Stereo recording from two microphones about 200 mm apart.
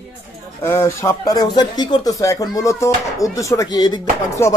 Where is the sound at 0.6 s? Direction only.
15° left (ahead or behind).